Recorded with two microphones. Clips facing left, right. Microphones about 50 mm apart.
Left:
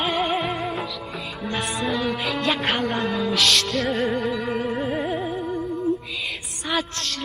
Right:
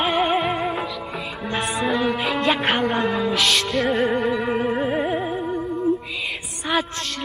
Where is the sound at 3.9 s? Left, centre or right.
Centre.